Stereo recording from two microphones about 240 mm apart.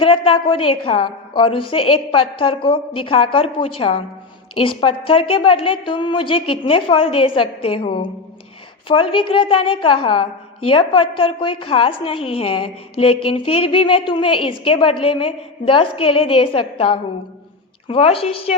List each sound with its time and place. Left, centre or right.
0.0 s a woman's voice: left